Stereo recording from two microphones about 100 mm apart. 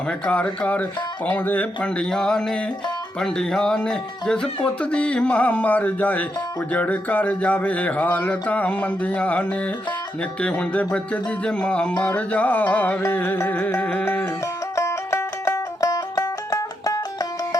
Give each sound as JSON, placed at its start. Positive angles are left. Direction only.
{"t": 0.1, "sound": "music", "side_deg": 10}
{"t": 14.4, "sound": "music", "side_deg": 30}